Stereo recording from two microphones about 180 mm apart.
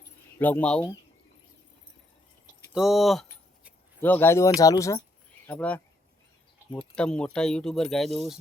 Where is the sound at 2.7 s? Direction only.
Centre (ahead or behind).